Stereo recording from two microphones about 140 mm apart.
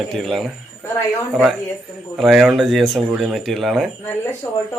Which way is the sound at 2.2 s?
Centre (ahead or behind).